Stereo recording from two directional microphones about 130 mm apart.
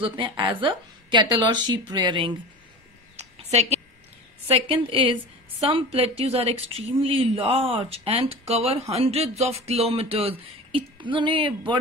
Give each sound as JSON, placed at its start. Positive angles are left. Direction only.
{"t": 0.0, "sound": "a woman's voice", "side_deg": -40}
{"t": 3.2, "sound": "a sound", "side_deg": -55}
{"t": 4.5, "sound": "a woman's voice", "side_deg": -45}